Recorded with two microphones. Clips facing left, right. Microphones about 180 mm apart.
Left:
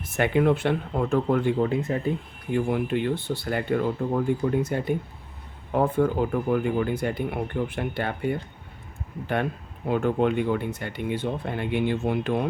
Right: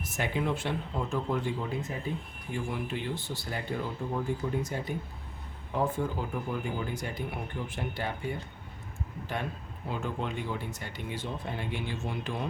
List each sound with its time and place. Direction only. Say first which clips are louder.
0.1 s speech: left 10 dB; 65° left (ahead or behind)